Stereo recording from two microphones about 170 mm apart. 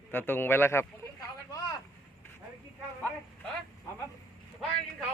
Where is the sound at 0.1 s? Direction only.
10° left (ahead or behind).